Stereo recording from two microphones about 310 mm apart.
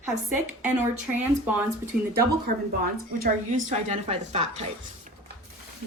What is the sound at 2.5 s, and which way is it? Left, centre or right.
A woman's voice, right.